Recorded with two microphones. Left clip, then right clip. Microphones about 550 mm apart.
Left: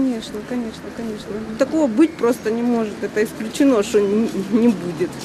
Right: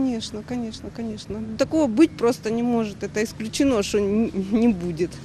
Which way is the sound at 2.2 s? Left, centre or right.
Right.